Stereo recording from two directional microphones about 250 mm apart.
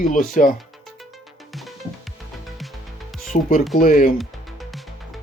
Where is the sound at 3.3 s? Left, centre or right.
Left.